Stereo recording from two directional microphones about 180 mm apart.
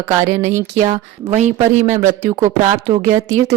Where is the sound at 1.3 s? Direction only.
40° right (ahead or behind).